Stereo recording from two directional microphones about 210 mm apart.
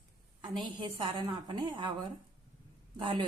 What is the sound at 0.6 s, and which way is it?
A woman's voice, 20° right (ahead or behind).